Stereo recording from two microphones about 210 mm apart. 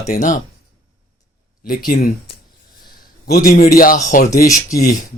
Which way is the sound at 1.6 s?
45° left (ahead or behind).